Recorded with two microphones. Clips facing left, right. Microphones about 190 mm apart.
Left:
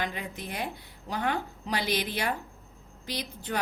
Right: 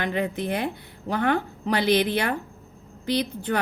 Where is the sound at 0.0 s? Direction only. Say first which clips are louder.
Right 9 dB; 60° right (ahead or behind).